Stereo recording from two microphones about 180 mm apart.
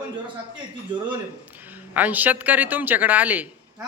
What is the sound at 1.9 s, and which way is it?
A woman's voice, 10° right (ahead or behind).